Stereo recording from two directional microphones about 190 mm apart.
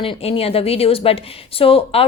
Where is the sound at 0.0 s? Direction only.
30° left (ahead or behind).